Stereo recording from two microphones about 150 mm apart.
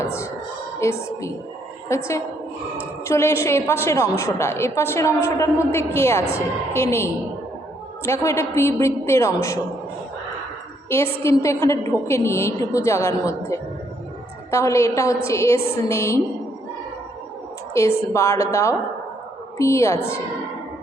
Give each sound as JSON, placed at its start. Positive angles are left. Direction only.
{"t": 0.0, "sound": "a woman's voice", "side_deg": 20}
{"t": 10.8, "sound": "a woman's voice", "side_deg": 15}
{"t": 17.7, "sound": "a woman's voice", "side_deg": 20}